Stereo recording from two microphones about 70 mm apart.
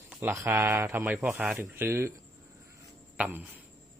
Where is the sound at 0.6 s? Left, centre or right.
Right.